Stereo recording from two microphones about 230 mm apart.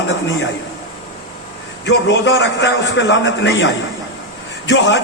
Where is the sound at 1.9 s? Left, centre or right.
Left.